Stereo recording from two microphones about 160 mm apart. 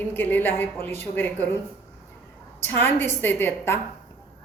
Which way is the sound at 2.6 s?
15° left (ahead or behind).